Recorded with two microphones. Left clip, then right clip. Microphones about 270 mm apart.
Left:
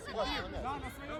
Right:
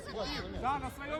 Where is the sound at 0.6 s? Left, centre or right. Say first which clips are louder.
Right 5 dB; right.